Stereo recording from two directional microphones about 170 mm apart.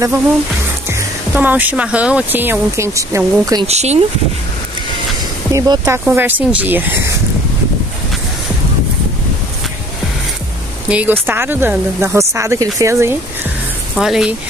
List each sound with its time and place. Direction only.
0.8 s speech: 10° right (ahead or behind)
3.6 s speech: 40° right (ahead or behind)
5.5 s speech: 20° right (ahead or behind)
10.9 s speech: 10° right (ahead or behind)
13.9 s speech: 5° right (ahead or behind)